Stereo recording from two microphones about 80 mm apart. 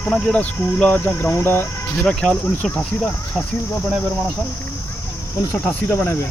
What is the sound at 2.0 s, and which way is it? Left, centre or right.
Cricket, centre.